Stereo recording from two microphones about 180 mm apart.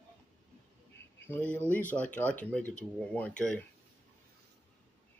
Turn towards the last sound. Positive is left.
turn(degrees=5)  # may be behind; listen again after turning